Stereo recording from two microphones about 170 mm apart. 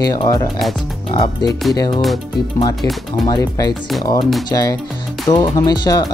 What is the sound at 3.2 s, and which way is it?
Speech, 25° left (ahead or behind).